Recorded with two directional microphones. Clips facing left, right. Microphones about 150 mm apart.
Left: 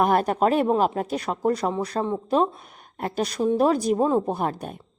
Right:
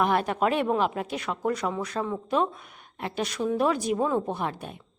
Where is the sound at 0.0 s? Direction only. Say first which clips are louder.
Left 4 dB; 40° left (ahead or behind).